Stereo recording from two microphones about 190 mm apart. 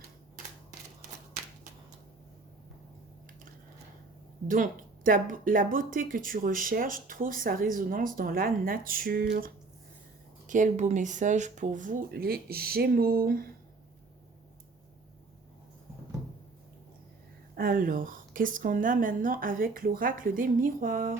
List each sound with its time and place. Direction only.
4.4 s speech: 45° right (ahead or behind)
10.4 s speech: 40° right (ahead or behind)
17.6 s speech: 50° right (ahead or behind)